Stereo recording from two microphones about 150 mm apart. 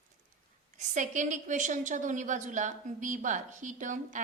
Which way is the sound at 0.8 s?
55° right (ahead or behind).